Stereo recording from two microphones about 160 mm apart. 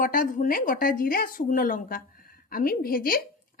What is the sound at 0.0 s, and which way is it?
A woman's voice, 60° left (ahead or behind).